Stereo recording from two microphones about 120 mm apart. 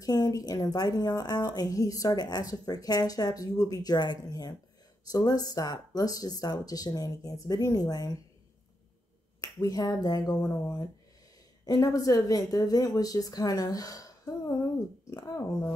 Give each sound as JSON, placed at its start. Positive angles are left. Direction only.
{"t": 0.0, "sound": "a woman's voice", "side_deg": 30}
{"t": 9.4, "sound": "a woman's voice", "side_deg": 30}